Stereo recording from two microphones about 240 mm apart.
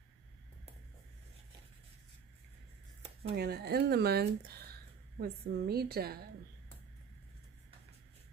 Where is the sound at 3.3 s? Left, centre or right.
Right.